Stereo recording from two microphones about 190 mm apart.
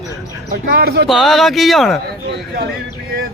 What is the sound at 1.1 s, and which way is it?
Speech, centre (ahead or behind).